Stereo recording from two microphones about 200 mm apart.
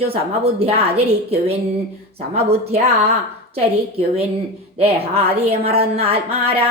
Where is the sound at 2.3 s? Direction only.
30° right (ahead or behind).